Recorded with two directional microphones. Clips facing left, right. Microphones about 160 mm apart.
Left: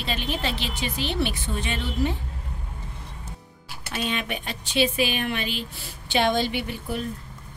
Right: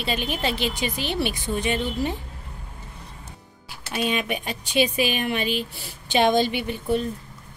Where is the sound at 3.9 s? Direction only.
15° right (ahead or behind).